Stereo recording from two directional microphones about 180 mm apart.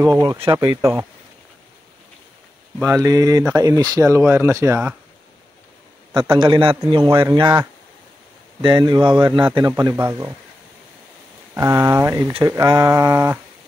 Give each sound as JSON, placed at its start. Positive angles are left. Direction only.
{"t": 0.0, "sound": "speech", "side_deg": -20}
{"t": 2.8, "sound": "speech", "side_deg": -15}
{"t": 6.3, "sound": "speech", "side_deg": -25}
{"t": 8.6, "sound": "speech", "side_deg": -25}
{"t": 9.7, "sound": "speech", "side_deg": -15}
{"t": 11.5, "sound": "speech", "side_deg": -15}